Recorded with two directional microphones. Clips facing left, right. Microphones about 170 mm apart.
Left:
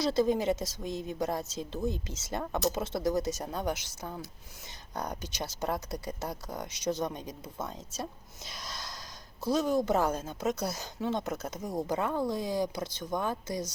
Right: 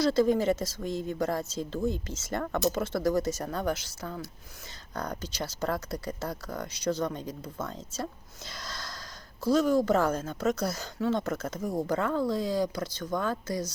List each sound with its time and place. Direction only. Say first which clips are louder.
0.0 s a woman's voice: right 3 dB; 20° left (ahead or behind)
8.4 s gasp: right 2 dB; 15° left (ahead or behind)
9.4 s a woman's voice: right 4 dB; 20° left (ahead or behind)